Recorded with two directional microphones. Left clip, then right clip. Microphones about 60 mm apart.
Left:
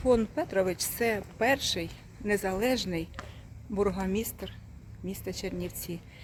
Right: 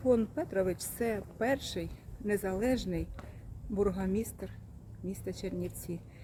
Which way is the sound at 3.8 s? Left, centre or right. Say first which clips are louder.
Left 3 dB; centre.